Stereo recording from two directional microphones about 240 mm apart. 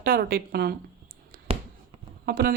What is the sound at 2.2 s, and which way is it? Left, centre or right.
Speech, right.